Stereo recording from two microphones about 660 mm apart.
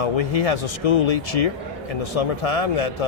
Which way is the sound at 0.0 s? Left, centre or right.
Left.